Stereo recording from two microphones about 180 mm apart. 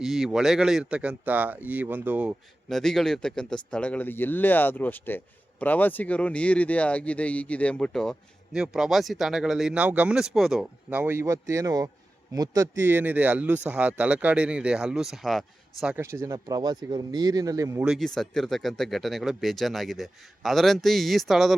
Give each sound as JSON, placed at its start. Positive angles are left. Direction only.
{"t": 0.0, "sound": "speech", "side_deg": 0}
{"t": 2.6, "sound": "speech", "side_deg": 0}
{"t": 16.2, "sound": "speech", "side_deg": -20}
{"t": 17.8, "sound": "speech", "side_deg": 0}